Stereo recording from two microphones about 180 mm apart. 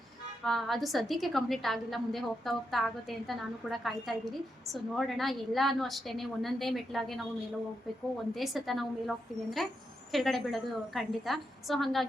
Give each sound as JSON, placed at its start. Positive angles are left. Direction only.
{"t": 0.4, "sound": "a woman's voice", "side_deg": 0}
{"t": 8.4, "sound": "a woman's voice", "side_deg": 0}